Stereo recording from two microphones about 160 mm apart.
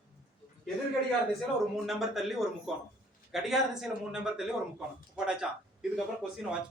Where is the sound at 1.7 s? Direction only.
Centre (ahead or behind).